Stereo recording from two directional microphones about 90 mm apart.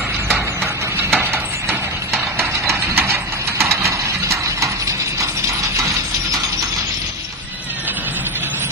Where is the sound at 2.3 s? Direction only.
30° right (ahead or behind).